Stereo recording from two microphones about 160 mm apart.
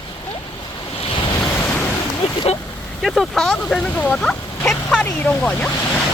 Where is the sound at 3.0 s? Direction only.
Centre (ahead or behind).